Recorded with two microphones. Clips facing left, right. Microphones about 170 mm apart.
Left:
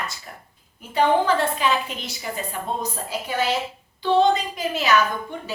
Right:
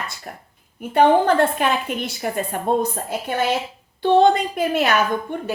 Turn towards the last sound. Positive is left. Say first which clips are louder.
# right 2 dB
turn(degrees=-55)  # may be behind; listen again after turning